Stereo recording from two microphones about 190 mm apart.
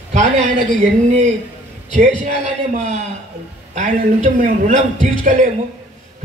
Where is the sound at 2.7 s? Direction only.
40° right (ahead or behind).